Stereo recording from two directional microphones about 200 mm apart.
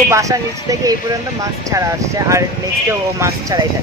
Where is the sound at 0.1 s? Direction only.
15° right (ahead or behind).